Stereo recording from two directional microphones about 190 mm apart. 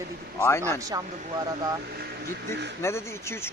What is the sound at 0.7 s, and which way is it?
Speech, 20° right (ahead or behind).